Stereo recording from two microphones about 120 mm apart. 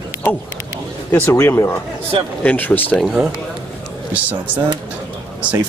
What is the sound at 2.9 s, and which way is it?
Speech, 5° right (ahead or behind).